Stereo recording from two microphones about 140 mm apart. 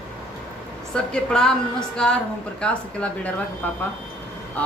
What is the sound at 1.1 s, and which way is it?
A woman's voice, 5° left (ahead or behind).